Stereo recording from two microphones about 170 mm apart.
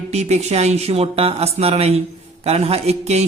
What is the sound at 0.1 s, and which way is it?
A man's voice, 40° right (ahead or behind).